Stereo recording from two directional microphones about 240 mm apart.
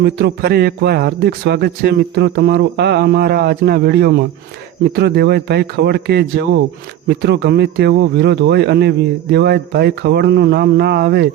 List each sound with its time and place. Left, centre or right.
0.0 s a man's voice: right